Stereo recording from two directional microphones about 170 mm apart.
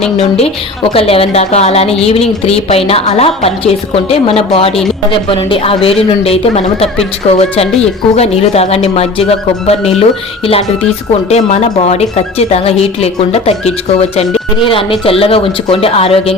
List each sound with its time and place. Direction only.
0.2 s a woman's voice: 35° left (ahead or behind)